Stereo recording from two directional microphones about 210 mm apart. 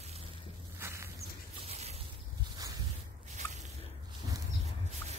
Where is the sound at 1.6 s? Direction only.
30° right (ahead or behind).